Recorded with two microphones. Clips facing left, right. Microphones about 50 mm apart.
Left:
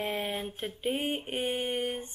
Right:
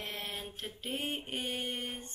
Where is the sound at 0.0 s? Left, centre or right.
Centre.